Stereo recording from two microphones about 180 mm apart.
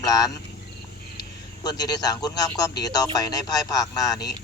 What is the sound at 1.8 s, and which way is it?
Speech, 20° left (ahead or behind).